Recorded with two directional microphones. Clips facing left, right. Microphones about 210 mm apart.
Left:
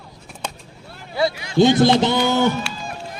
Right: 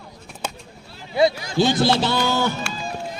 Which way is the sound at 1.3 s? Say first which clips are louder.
Left 1 dB; 40° right (ahead or behind).